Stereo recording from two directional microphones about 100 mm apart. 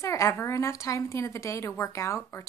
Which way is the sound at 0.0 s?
30° left (ahead or behind).